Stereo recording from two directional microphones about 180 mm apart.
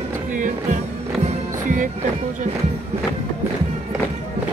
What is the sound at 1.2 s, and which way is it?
Music, 45° right (ahead or behind).